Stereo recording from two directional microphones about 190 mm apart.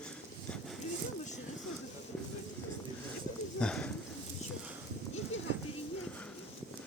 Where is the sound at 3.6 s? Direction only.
5° left (ahead or behind).